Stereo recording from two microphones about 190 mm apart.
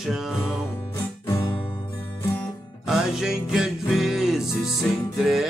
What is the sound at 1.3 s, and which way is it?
Music, 25° left (ahead or behind).